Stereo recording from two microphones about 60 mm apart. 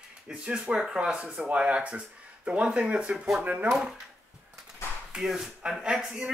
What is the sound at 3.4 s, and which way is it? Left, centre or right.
Speech, right.